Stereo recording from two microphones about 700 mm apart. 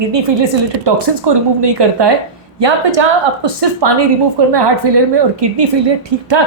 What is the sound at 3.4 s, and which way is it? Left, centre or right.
A woman's voice, right.